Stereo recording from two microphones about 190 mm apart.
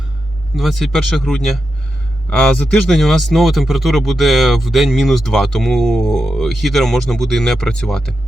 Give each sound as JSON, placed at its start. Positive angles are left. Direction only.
{"t": 0.5, "sound": "speech", "side_deg": 0}